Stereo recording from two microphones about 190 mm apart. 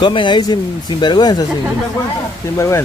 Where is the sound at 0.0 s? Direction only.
25° left (ahead or behind).